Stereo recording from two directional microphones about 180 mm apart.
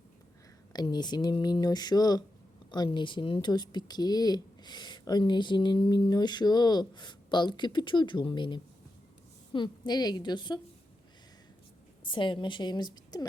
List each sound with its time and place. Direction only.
0.7 s speech: 25° left (ahead or behind)
12.1 s speech: 25° left (ahead or behind)